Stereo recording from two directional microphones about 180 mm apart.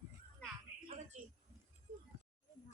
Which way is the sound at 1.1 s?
40° right (ahead or behind).